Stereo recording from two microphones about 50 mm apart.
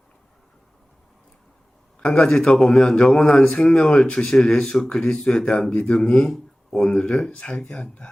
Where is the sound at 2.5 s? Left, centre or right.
Centre.